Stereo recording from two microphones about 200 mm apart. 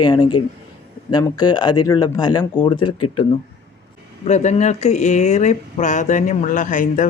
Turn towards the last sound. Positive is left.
turn(degrees=40)  # may be behind; listen again after turning